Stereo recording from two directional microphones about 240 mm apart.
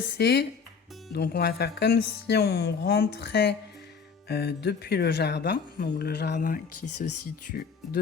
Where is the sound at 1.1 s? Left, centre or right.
Left.